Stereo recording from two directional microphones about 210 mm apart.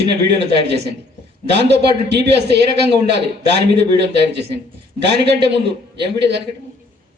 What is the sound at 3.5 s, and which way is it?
A man's voice, 55° right (ahead or behind).